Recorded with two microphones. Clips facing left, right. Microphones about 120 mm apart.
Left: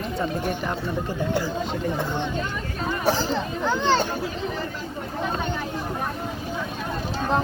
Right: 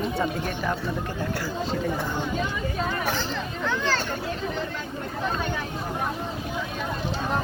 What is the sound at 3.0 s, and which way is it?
Speech, 35° left (ahead or behind).